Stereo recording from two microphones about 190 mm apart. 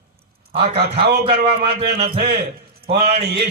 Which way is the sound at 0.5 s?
30° right (ahead or behind).